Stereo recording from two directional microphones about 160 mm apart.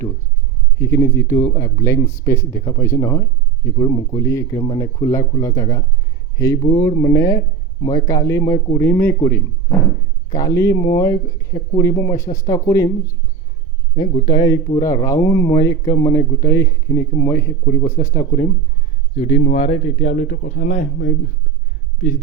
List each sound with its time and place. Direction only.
0.8 s speech: 15° left (ahead or behind)
19.1 s a man's voice: 40° left (ahead or behind)